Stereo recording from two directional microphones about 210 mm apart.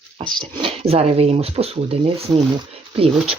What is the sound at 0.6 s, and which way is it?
Speech, 30° right (ahead or behind).